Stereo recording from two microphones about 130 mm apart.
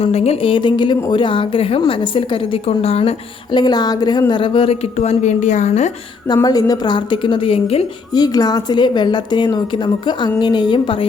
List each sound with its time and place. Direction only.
0.0 s a woman's voice: 55° left (ahead or behind)
3.5 s a woman's voice: 35° left (ahead or behind); by 5.9 s 65° left (ahead or behind)
6.2 s a woman's voice: 30° left (ahead or behind); by 7.9 s 45° left (ahead or behind)
8.1 s a woman's voice: 30° left (ahead or behind)